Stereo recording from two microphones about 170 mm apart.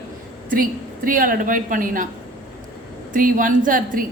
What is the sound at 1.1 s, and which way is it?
A woman's voice, 55° right (ahead or behind).